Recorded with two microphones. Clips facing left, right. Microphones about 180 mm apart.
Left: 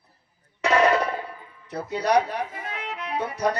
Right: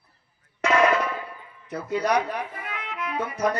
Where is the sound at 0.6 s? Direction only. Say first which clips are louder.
Left 1 dB; 35° left (ahead or behind).